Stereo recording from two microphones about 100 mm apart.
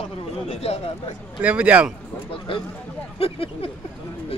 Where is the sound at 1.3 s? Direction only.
15° right (ahead or behind).